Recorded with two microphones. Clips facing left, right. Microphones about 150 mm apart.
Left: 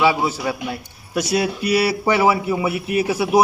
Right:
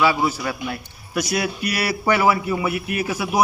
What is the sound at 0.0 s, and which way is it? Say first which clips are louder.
A man's voice: left 2 dB; 25° left (ahead or behind).